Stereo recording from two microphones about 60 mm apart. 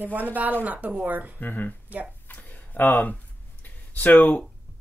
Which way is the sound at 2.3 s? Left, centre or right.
Left.